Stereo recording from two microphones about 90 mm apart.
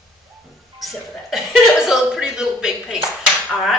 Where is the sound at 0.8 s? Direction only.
Centre (ahead or behind).